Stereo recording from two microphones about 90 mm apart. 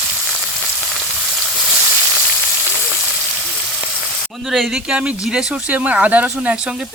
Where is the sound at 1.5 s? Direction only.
5° right (ahead or behind).